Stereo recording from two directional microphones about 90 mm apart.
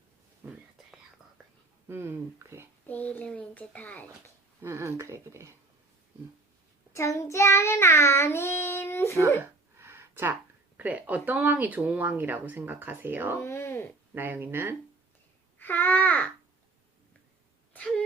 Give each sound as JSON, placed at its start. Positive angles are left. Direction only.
{"t": 0.4, "sound": "whispering", "side_deg": -20}
{"t": 1.9, "sound": "speech", "side_deg": -30}
{"t": 2.8, "sound": "a child's voice", "side_deg": 15}
{"t": 4.6, "sound": "speech", "side_deg": -30}
{"t": 6.9, "sound": "child singing", "side_deg": 35}
{"t": 9.7, "sound": "a sound", "side_deg": -25}
{"t": 10.8, "sound": "speech", "side_deg": -15}
{"t": 13.4, "sound": "a sound", "side_deg": 30}
{"t": 14.2, "sound": "speech", "side_deg": -20}
{"t": 15.5, "sound": "babbling", "side_deg": 20}
{"t": 17.7, "sound": "wail", "side_deg": 10}